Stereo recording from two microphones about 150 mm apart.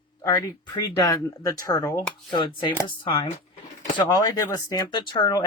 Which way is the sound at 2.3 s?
35° left (ahead or behind).